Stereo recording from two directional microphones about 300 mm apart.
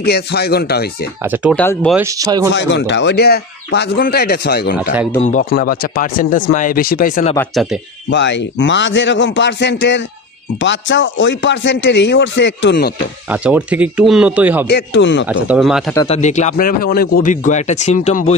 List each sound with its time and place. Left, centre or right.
0.0 s speech: left
1.2 s speech: centre
1.5 s speech: centre
2.0 s speech: centre
2.5 s speech: left
7.3 s speech: centre
8.1 s speech: left
13.3 s speech: centre
14.7 s speech: left
15.2 s speech: centre
15.9 s speech: centre
16.2 s speech: left